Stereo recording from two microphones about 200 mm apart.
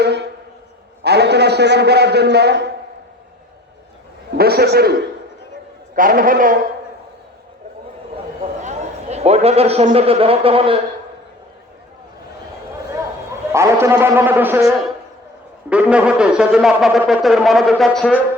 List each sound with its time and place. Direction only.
0.0 s music: 60° right (ahead or behind)
1.0 s a man's voice: 55° right (ahead or behind)
4.4 s a man's voice: 50° right (ahead or behind)
6.0 s a man's voice: 45° right (ahead or behind)
8.4 s a sound: 35° right (ahead or behind)
13.5 s a man's voice: 15° right (ahead or behind)
15.7 s speech: 5° right (ahead or behind)